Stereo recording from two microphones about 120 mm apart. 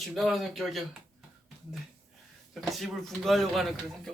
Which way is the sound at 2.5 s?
Centre (ahead or behind).